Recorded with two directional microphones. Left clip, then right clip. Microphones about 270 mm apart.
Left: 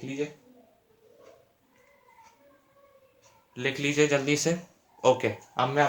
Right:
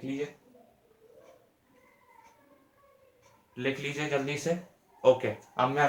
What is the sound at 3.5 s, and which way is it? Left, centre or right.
Speech, left.